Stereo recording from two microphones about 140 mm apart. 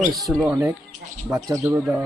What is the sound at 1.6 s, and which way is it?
Speech, 10° right (ahead or behind).